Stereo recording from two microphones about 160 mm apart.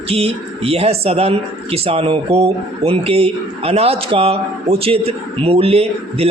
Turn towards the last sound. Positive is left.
turn(degrees=-40)  # may be behind; listen again after turning